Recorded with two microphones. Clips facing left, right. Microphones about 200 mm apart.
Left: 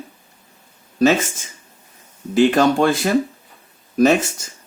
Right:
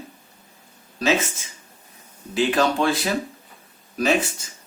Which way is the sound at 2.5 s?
50° left (ahead or behind).